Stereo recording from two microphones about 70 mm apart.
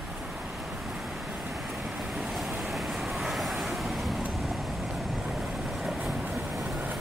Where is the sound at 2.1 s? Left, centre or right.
Centre.